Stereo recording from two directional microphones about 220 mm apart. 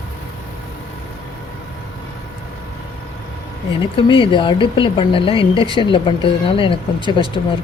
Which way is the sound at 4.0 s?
20° left (ahead or behind).